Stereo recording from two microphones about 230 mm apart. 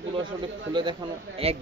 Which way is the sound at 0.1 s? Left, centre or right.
Right.